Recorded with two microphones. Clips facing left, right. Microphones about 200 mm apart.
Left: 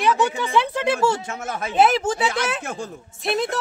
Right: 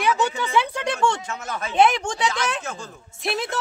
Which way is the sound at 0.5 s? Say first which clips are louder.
Left 3 dB; 5° left (ahead or behind).